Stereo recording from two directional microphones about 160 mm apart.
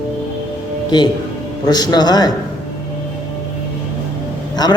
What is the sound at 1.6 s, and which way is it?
Speech, 25° left (ahead or behind).